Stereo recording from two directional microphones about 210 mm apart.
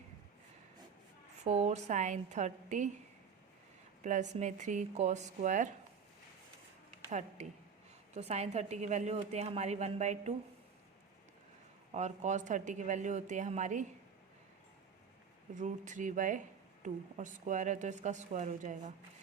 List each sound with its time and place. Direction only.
1.5 s a woman's voice: 35° right (ahead or behind)
4.0 s a woman's voice: 35° right (ahead or behind)
7.1 s a woman's voice: 35° right (ahead or behind)
11.9 s a woman's voice: 35° right (ahead or behind)
15.5 s a woman's voice: 35° right (ahead or behind)